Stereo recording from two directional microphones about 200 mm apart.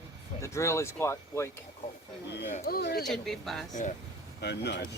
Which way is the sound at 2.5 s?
50° left (ahead or behind).